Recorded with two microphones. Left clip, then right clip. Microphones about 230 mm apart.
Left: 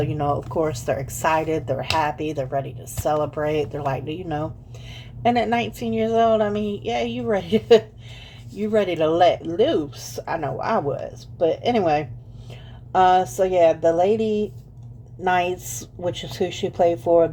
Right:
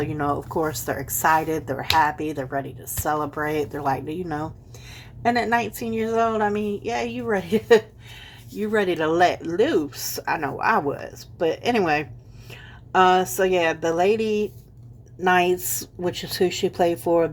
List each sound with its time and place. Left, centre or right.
0.1 s speech: right